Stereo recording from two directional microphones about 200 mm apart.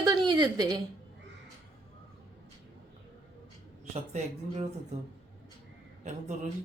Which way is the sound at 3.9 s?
35° right (ahead or behind).